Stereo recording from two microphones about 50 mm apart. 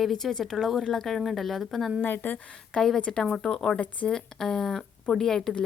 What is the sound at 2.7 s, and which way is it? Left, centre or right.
Speech, centre.